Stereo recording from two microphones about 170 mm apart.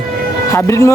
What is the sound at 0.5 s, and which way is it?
Speech, 15° left (ahead or behind).